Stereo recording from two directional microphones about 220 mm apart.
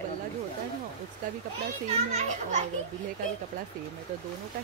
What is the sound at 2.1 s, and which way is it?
Speech, 30° right (ahead or behind).